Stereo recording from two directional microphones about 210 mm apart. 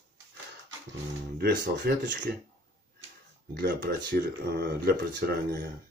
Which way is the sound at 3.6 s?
45° right (ahead or behind).